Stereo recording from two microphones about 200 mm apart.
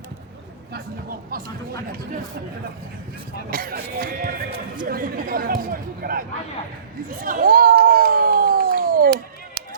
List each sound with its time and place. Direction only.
1.3 s speech: 45° right (ahead or behind)
3.5 s speech: 50° right (ahead or behind)
7.2 s a sound: 45° right (ahead or behind)